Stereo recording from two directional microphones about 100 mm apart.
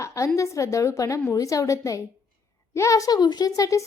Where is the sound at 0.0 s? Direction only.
30° left (ahead or behind).